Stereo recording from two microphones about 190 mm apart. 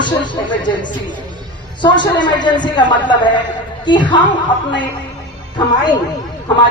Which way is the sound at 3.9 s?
25° left (ahead or behind).